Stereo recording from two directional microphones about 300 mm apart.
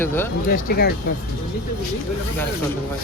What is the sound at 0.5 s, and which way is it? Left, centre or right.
Speech, left.